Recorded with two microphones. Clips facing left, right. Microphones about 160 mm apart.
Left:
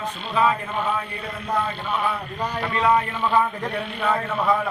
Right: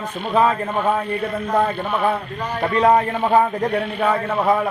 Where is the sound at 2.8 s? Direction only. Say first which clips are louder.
Right 5 dB; 40° right (ahead or behind).